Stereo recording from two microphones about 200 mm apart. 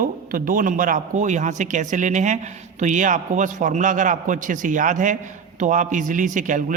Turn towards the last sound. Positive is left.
turn(degrees=-40)  # may be behind; listen again after turning